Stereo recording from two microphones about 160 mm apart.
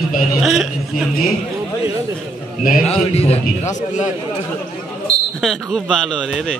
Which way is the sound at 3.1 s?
40° left (ahead or behind).